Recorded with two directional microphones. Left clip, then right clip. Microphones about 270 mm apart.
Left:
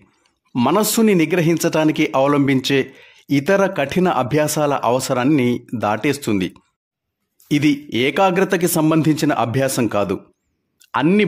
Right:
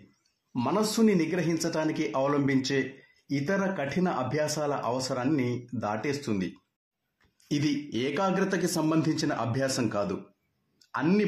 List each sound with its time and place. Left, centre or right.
0.5 s speech: left